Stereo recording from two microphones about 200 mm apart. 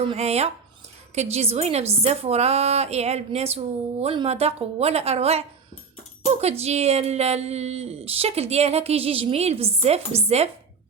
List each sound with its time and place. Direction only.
0.1 s speech: 30° right (ahead or behind)